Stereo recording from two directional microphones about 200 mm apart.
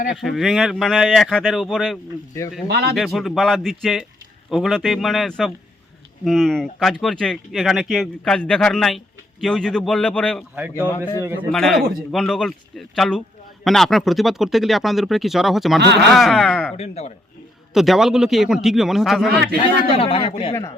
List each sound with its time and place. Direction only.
0.1 s speech: centre (ahead or behind)
2.6 s speech: 55° right (ahead or behind)
2.9 s a man's voice: centre (ahead or behind)
16.7 s speech: 30° left (ahead or behind)
17.7 s speech: centre (ahead or behind)
19.5 s a man's voice: 25° left (ahead or behind)
20.5 s a man's voice: 15° left (ahead or behind)